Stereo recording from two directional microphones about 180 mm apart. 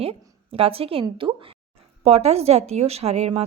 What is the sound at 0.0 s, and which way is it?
A woman's voice, 35° right (ahead or behind).